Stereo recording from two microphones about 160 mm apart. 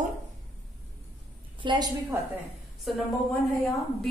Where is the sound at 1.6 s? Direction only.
25° right (ahead or behind).